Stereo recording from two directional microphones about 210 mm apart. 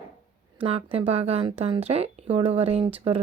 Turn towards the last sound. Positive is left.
turn(degrees=-25)  # may be behind; listen again after turning